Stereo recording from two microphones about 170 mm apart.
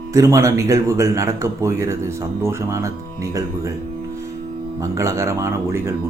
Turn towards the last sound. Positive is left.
turn(degrees=-15)  # may be behind; listen again after turning